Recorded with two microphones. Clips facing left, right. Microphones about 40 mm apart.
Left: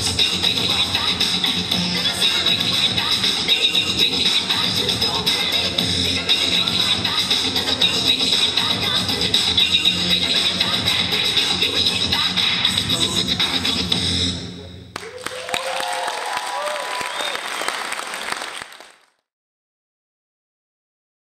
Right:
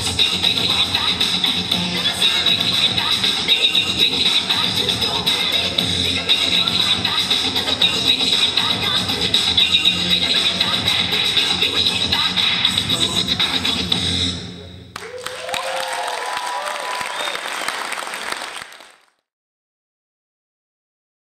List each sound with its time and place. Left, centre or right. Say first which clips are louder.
0.0 s music: right 1 dB; centre
15.9 s applause: even; centre